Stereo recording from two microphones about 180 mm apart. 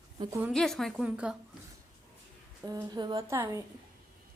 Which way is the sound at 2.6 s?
20° right (ahead or behind).